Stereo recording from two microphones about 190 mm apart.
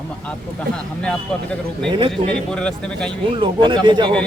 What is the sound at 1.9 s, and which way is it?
Speech, 25° right (ahead or behind).